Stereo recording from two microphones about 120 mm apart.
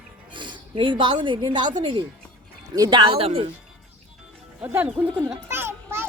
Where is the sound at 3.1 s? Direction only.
55° right (ahead or behind).